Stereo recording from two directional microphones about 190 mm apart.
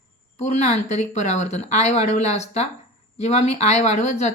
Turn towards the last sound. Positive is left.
turn(degrees=40)  # may be behind; listen again after turning